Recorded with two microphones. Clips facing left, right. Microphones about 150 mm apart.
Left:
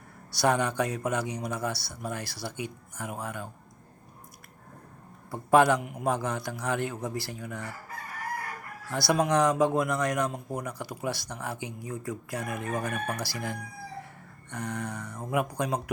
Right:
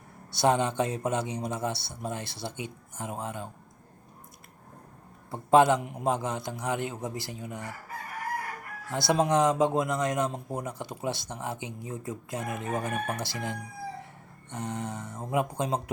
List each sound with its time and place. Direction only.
0.3 s speech: 25° right (ahead or behind)
5.3 s speech: 20° right (ahead or behind)
8.9 s speech: 20° right (ahead or behind)